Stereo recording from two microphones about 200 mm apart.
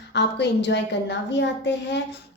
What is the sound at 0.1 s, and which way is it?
A woman's voice, 60° left (ahead or behind).